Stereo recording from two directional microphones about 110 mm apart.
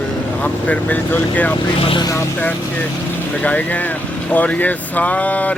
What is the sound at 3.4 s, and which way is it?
Speech, 15° left (ahead or behind).